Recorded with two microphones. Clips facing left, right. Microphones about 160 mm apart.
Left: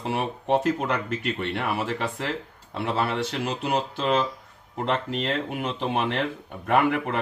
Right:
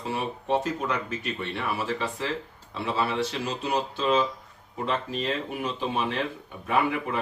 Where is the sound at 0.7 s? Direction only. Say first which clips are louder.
Left 3 dB; 60° left (ahead or behind).